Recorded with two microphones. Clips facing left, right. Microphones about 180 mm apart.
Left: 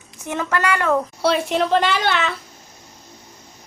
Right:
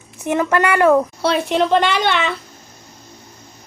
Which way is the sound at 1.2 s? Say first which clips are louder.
Right 2 dB; centre (ahead or behind).